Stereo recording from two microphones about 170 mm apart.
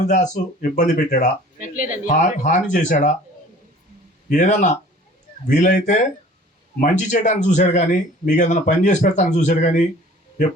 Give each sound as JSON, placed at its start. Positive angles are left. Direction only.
{"t": 0.0, "sound": "speech", "side_deg": 45}
{"t": 4.3, "sound": "speech", "side_deg": 45}